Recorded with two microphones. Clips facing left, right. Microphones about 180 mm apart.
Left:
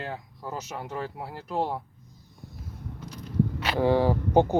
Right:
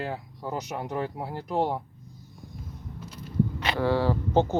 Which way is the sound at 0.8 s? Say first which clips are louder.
Right 3 dB; 15° right (ahead or behind).